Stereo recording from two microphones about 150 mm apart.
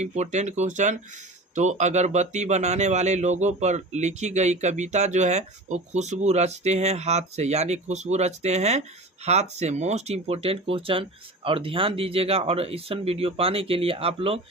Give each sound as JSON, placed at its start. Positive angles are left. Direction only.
{"t": 0.0, "sound": "speech", "side_deg": -50}